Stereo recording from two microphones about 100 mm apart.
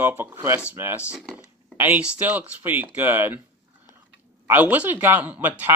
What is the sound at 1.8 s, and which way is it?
Speech, 15° right (ahead or behind).